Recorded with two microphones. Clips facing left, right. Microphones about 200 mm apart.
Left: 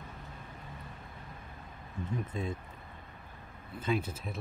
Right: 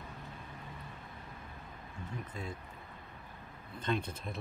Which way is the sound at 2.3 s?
25° left (ahead or behind).